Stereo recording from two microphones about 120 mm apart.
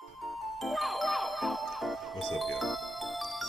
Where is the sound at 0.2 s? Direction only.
Centre (ahead or behind).